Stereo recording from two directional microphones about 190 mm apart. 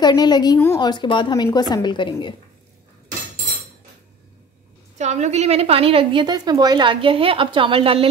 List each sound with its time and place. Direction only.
0.0 s a woman's voice: 20° left (ahead or behind)
4.9 s a woman's voice: 40° right (ahead or behind)